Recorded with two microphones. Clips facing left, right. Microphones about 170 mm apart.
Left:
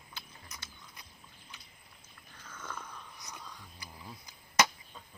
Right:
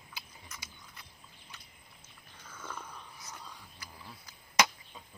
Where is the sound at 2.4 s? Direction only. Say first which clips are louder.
Even; 10° right (ahead or behind).